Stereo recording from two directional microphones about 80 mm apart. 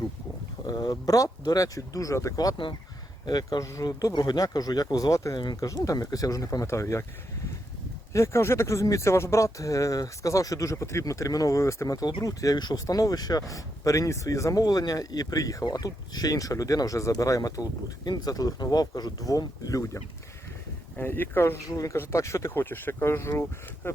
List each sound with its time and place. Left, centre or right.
0.7 s speech: left
3.8 s speech: left
8.1 s speech: left
20.9 s speech: left